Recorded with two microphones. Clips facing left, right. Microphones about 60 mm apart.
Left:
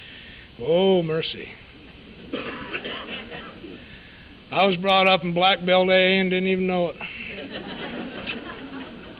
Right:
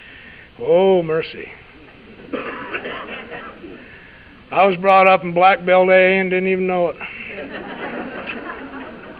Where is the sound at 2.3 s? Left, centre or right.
Right.